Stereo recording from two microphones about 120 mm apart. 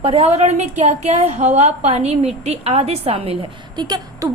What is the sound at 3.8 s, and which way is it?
Speech, 35° right (ahead or behind).